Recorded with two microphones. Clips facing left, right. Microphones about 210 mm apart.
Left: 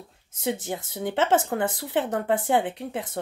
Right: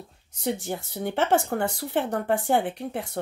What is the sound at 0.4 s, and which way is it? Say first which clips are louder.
Speech: even; 20° left (ahead or behind).